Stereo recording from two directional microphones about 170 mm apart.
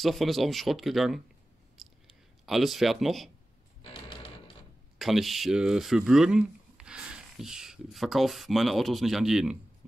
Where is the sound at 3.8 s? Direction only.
30° left (ahead or behind).